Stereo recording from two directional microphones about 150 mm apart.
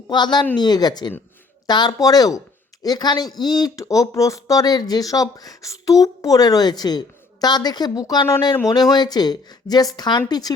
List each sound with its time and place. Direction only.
0.1 s speech: 30° left (ahead or behind)